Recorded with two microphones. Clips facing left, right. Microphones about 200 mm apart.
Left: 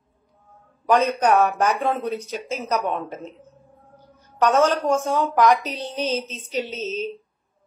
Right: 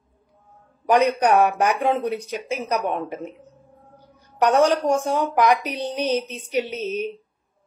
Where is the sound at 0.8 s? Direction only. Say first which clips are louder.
Right 1 dB; 15° right (ahead or behind).